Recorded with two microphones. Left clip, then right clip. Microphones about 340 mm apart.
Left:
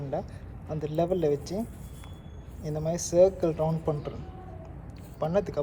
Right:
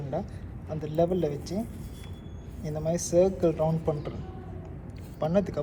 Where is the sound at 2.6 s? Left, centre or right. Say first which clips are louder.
Right 1 dB; centre.